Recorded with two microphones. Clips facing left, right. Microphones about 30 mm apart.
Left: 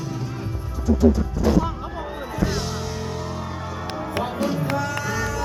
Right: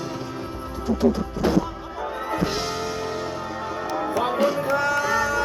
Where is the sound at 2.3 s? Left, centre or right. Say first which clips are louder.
Even; right.